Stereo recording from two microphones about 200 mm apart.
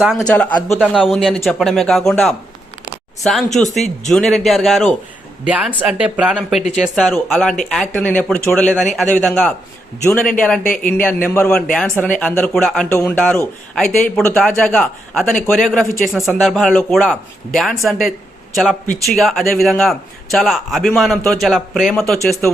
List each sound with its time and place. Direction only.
0.0 s a man's voice: centre (ahead or behind)
6.6 s speech: 35° left (ahead or behind)
6.8 s a man's voice: centre (ahead or behind)
10.6 s speech: 45° left (ahead or behind)
11.0 s a man's voice: 10° left (ahead or behind)